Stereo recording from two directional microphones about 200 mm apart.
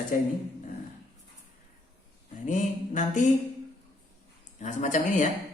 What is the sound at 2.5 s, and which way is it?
Speech, 40° left (ahead or behind).